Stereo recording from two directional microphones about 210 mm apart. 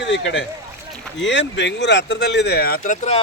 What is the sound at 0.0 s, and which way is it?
A man's voice, 60° left (ahead or behind).